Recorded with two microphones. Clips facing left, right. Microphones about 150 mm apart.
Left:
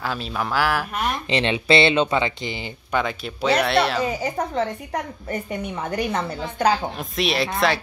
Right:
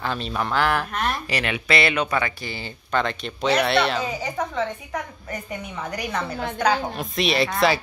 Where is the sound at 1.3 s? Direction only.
25° left (ahead or behind); by 4.0 s centre (ahead or behind).